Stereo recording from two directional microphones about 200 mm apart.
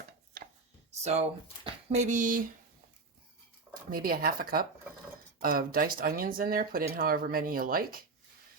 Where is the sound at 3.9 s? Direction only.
45° right (ahead or behind).